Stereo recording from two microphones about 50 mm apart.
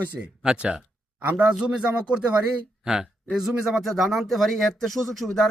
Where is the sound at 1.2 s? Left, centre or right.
Right.